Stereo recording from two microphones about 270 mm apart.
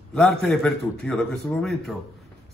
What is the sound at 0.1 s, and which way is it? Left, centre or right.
Speech, centre.